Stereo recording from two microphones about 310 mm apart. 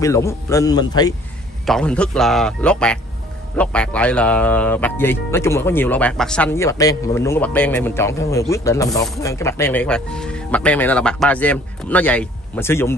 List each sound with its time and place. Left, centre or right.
0.0 s a man's voice: centre